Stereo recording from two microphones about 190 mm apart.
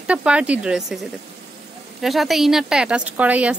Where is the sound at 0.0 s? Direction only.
5° right (ahead or behind).